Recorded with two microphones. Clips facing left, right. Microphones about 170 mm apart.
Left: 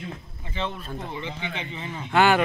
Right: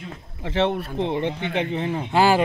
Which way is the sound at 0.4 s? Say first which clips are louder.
Right 11 dB; 80° right.